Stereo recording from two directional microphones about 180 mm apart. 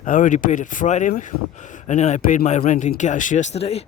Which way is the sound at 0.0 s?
45° left (ahead or behind).